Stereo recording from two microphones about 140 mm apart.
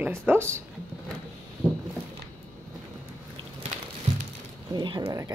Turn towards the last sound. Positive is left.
turn(degrees=-20)  # may be behind; listen again after turning